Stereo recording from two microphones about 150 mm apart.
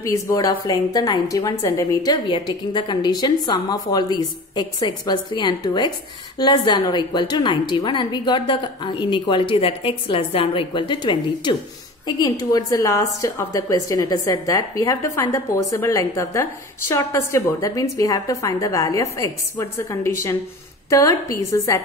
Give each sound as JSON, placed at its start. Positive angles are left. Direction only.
{"t": 0.0, "sound": "a woman's voice", "side_deg": 20}
{"t": 2.2, "sound": "a woman's voice", "side_deg": 35}